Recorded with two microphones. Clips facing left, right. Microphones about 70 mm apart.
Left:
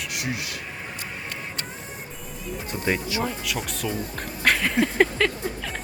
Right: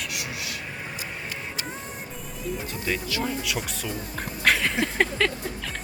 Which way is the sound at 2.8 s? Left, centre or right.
Left.